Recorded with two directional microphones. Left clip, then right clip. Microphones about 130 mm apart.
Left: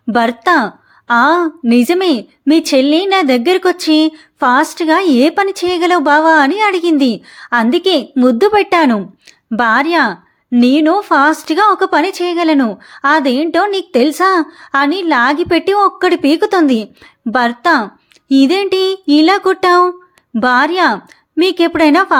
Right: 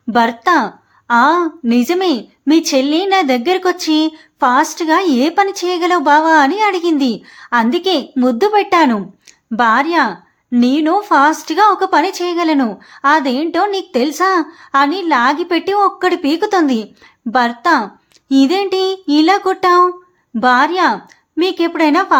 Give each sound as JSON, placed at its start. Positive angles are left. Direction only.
{"t": 0.1, "sound": "a woman's voice", "side_deg": 30}